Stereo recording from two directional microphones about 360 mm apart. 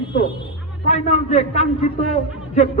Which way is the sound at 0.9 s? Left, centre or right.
Centre.